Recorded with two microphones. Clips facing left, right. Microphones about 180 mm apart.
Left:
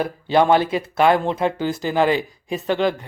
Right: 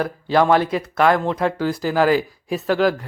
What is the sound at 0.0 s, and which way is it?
Speech, 25° left (ahead or behind).